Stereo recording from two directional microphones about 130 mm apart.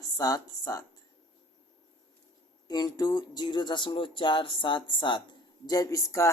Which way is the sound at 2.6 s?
30° left (ahead or behind).